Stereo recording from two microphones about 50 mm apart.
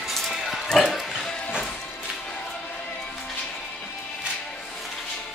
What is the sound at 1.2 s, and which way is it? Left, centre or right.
Music, centre.